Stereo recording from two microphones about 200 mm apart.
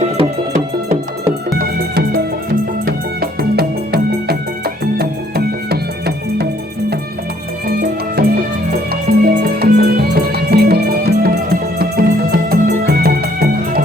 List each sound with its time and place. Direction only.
1.5 s music: 50° right (ahead or behind)
8.2 s music: 50° right (ahead or behind)